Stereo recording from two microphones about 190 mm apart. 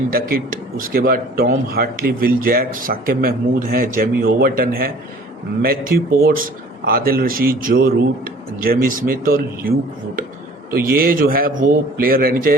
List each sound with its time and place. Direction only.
0.1 s speech: 50° right (ahead or behind)
10.9 s speech: 50° right (ahead or behind)